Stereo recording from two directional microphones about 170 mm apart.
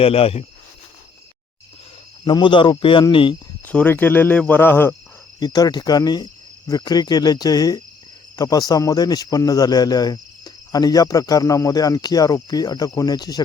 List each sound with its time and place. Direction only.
0.0 s speech: 35° left (ahead or behind)
2.2 s speech: 30° left (ahead or behind)
3.7 s speech: 10° left (ahead or behind)
5.4 s speech: 25° left (ahead or behind)